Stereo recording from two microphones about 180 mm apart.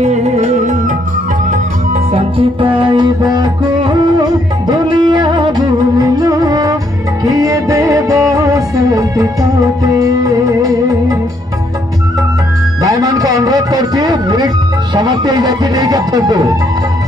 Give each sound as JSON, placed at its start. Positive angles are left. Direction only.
{"t": 0.0, "sound": "music", "side_deg": -40}
{"t": 2.1, "sound": "music", "side_deg": -30}
{"t": 12.8, "sound": "a sound", "side_deg": -20}
{"t": 15.0, "sound": "speech", "side_deg": -20}